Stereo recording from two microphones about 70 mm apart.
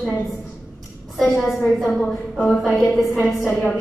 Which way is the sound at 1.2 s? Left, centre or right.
Centre.